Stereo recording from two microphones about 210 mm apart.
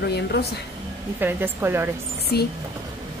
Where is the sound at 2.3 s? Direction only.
50° left (ahead or behind).